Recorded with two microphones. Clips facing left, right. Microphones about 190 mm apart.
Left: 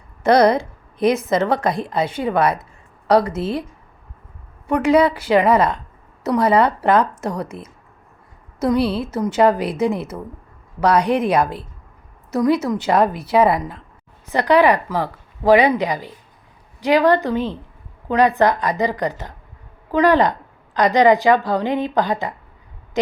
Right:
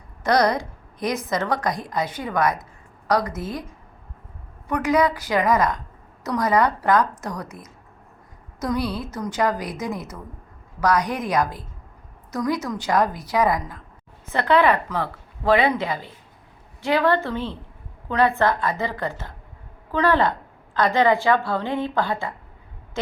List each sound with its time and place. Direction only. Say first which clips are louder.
0.2 s a woman's voice: left 6 dB; 25° left (ahead or behind)
4.7 s a woman's voice: left 5 dB; 30° left (ahead or behind)
8.5 s a woman's voice: left 7 dB; 25° left (ahead or behind)
14.3 s speech: left 4 dB; 15° left (ahead or behind)